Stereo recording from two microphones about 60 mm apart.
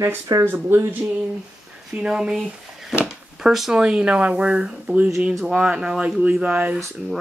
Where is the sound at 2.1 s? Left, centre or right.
Centre.